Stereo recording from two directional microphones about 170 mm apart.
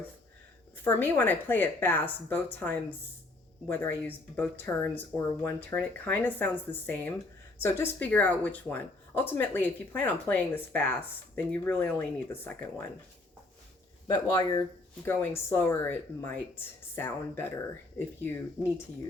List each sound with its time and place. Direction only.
0.9 s speech: 15° left (ahead or behind)
14.1 s speech: 20° left (ahead or behind)